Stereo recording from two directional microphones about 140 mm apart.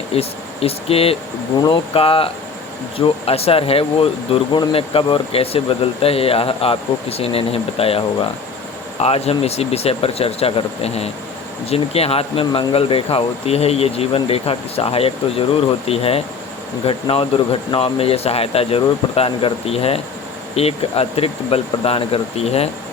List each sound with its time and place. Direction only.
0.1 s speech: 45° left (ahead or behind)
1.5 s speech: 35° left (ahead or behind)